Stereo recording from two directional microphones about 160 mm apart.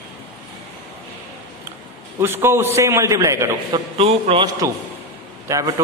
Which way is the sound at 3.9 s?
35° right (ahead or behind).